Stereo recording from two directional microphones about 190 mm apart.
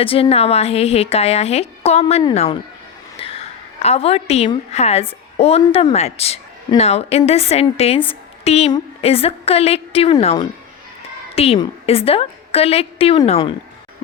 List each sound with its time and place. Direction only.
0.0 s a woman's voice: 30° left (ahead or behind)
11.3 s a woman's voice: 30° left (ahead or behind)